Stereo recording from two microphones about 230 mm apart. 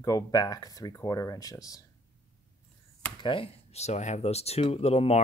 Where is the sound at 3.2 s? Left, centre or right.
Left.